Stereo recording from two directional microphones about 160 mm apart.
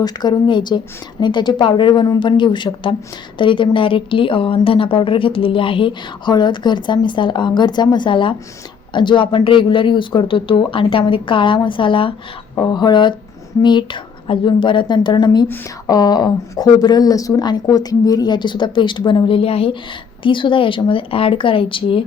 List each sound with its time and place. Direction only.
0.0 s a woman's voice: 25° left (ahead or behind)
15.4 s speech: 15° left (ahead or behind); by 22.0 s 35° left (ahead or behind)